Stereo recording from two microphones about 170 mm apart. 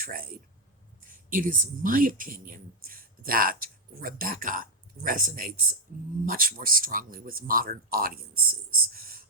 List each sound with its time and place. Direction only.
0.0 s speech: 60° right (ahead or behind)